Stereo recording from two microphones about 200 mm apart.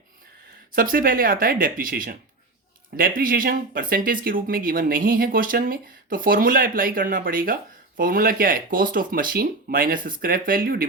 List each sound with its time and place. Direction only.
0.7 s speech: 45° right (ahead or behind)
3.2 s speech: 45° right (ahead or behind)